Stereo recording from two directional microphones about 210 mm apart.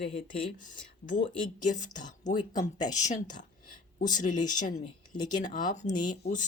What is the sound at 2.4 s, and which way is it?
Speech, 20° left (ahead or behind).